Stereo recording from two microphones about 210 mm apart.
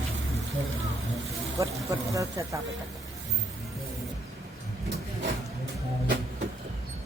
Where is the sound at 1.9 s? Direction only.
15° right (ahead or behind).